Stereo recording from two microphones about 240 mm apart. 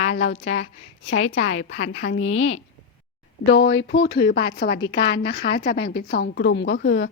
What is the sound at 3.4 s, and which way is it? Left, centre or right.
A woman's voice, left.